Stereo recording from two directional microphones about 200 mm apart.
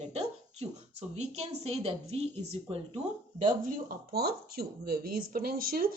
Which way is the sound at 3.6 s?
50° right (ahead or behind).